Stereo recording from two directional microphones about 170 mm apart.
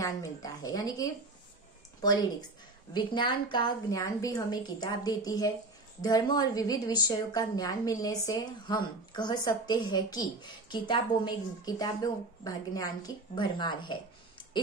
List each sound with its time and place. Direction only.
0.0 s speech: 20° left (ahead or behind)
2.9 s a woman's voice: 25° left (ahead or behind)